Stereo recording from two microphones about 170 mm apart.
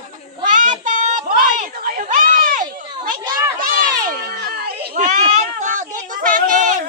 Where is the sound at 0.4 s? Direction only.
50° right (ahead or behind).